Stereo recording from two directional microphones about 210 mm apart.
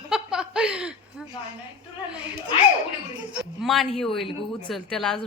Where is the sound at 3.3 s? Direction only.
Centre (ahead or behind).